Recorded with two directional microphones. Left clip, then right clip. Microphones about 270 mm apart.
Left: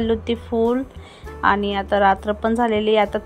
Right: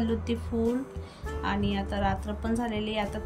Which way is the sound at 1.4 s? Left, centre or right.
Centre.